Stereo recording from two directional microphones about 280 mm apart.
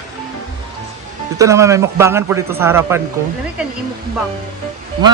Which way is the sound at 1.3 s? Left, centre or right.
Centre.